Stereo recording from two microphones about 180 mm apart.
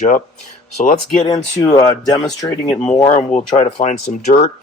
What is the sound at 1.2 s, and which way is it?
Speech, 20° left (ahead or behind).